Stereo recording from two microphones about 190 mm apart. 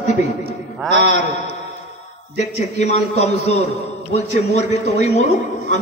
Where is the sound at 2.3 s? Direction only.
35° left (ahead or behind).